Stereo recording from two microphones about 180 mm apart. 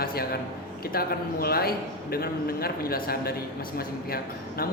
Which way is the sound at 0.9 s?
55° left (ahead or behind).